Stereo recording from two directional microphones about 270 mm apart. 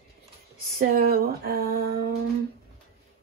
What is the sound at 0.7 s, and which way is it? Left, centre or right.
Speech, right.